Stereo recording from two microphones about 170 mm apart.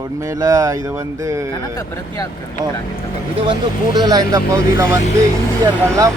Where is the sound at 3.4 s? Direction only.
25° right (ahead or behind).